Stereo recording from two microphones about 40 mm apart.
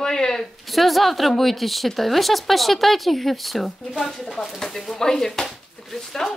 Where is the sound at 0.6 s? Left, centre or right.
Centre.